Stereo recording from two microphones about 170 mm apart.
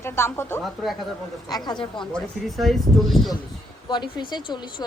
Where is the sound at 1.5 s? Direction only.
25° left (ahead or behind).